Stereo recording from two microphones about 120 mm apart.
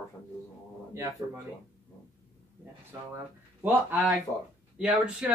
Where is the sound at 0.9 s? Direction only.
20° right (ahead or behind).